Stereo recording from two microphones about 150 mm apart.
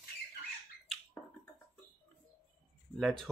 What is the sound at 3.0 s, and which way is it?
Speech, 5° left (ahead or behind).